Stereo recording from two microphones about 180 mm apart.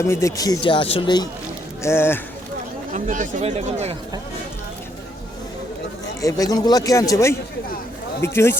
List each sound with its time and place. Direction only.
0.0 s speech: 15° left (ahead or behind)
1.8 s speech: 15° left (ahead or behind)
2.9 s speech: 45° right (ahead or behind)
6.2 s speech: 20° left (ahead or behind)